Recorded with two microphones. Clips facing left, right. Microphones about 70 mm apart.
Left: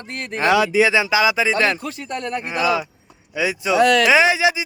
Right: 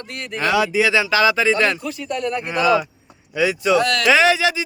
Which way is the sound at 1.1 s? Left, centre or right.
Centre.